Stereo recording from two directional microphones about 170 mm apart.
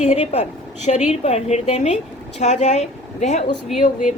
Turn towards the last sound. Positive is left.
turn(degrees=45)  # may be behind; listen again after turning